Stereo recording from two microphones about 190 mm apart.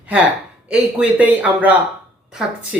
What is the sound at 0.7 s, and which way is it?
Speech, 5° right (ahead or behind).